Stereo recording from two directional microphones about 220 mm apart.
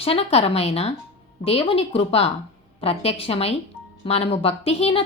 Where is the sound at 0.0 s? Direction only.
25° left (ahead or behind).